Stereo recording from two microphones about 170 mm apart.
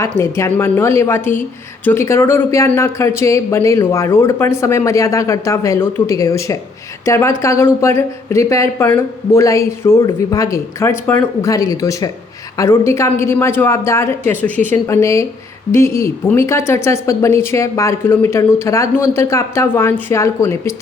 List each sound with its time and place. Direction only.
0.0 s speech: 15° left (ahead or behind)